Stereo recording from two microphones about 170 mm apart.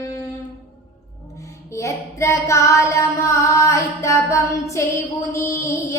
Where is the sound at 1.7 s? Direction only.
15° left (ahead or behind).